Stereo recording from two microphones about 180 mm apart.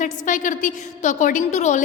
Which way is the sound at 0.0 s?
45° left (ahead or behind).